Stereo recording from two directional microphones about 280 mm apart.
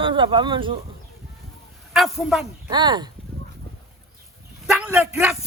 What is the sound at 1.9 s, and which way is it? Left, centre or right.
Speech, centre.